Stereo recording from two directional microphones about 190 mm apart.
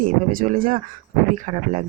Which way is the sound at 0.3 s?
45° right (ahead or behind).